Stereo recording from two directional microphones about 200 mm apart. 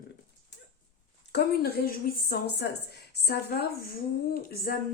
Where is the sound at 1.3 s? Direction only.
50° left (ahead or behind).